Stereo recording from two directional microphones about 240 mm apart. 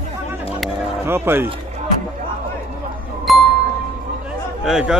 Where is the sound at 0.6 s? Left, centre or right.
Centre.